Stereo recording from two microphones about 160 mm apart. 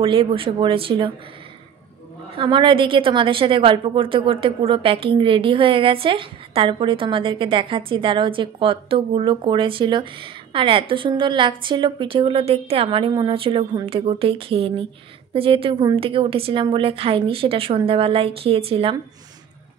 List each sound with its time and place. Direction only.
0.0 s a woman's voice: 35° right (ahead or behind)
2.3 s a woman's voice: 30° right (ahead or behind)